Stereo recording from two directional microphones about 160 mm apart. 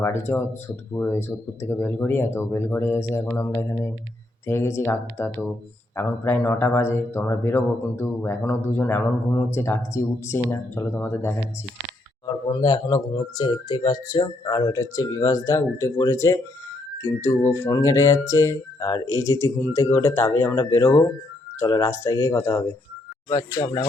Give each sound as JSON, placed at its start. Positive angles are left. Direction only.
{"t": 0.0, "sound": "speech", "side_deg": 15}
{"t": 12.2, "sound": "speech", "side_deg": 25}